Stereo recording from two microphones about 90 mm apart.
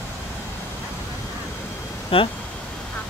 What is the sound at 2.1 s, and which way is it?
Speech, 90° left.